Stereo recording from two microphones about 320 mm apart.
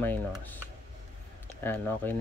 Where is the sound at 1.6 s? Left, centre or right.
Centre.